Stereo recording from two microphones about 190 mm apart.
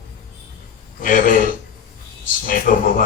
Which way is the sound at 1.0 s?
45° left (ahead or behind).